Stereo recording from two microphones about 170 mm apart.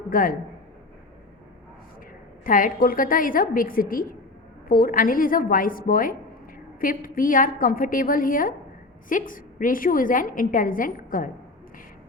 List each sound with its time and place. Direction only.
0.1 s a woman's voice: 55° left (ahead or behind)
2.4 s a woman's voice: 55° left (ahead or behind)